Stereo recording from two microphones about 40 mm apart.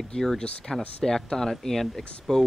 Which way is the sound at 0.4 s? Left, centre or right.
Left.